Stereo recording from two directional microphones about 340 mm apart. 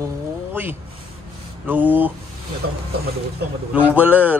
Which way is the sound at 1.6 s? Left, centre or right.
Centre.